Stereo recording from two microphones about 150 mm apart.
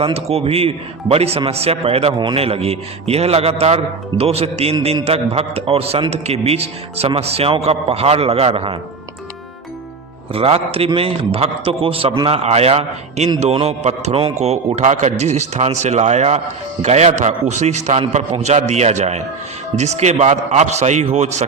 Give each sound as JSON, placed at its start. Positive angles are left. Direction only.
{"t": 0.0, "sound": "a man's voice", "side_deg": -45}
{"t": 10.3, "sound": "a man's voice", "side_deg": -40}
{"t": 14.3, "sound": "a man's voice", "side_deg": -50}